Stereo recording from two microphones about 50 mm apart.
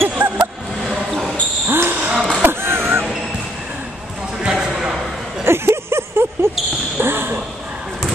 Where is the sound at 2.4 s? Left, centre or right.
Right.